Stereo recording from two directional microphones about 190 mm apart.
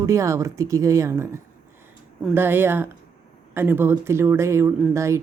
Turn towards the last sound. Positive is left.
turn(degrees=-15)  # may be behind; listen again after turning